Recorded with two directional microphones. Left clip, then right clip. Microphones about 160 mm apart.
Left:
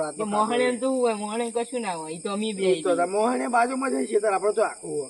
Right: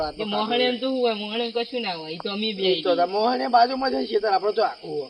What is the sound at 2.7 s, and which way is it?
Speech, 30° left (ahead or behind).